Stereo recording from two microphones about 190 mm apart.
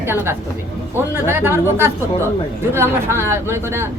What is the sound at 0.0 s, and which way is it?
A woman's voice, 10° right (ahead or behind).